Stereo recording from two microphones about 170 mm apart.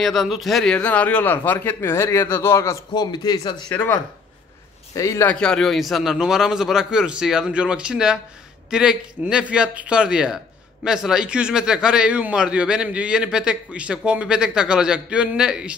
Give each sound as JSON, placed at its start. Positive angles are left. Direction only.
{"t": 0.0, "sound": "a man's voice", "side_deg": 0}
{"t": 3.6, "sound": "a man's voice", "side_deg": 10}
{"t": 5.3, "sound": "a man's voice", "side_deg": 5}